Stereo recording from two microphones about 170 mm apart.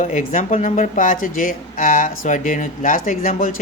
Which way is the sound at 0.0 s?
45° left (ahead or behind).